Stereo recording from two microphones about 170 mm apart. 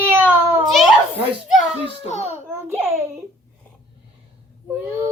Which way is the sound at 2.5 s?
15° right (ahead or behind).